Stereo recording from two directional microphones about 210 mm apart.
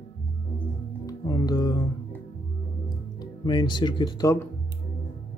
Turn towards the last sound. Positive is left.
turn(degrees=20)  # may be behind; listen again after turning